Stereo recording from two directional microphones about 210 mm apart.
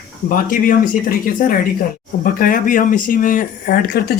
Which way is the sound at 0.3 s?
40° left (ahead or behind).